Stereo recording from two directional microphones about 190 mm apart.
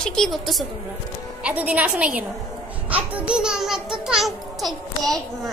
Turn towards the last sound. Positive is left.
turn(degrees=0)  # may be behind; listen again after turning